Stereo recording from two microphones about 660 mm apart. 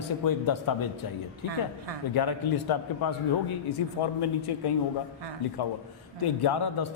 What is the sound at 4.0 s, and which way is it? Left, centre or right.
Speech, left.